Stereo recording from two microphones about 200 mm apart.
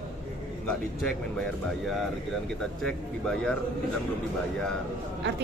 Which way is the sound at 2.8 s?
5° left (ahead or behind).